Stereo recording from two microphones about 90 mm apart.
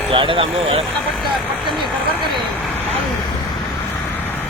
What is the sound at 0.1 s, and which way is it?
Speech, 75° right (ahead or behind).